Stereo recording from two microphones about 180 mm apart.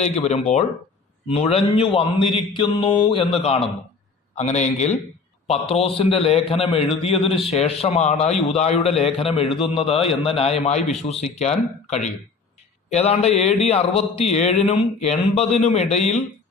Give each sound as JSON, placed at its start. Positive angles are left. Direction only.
{"t": 0.0, "sound": "a man's voice", "side_deg": 40}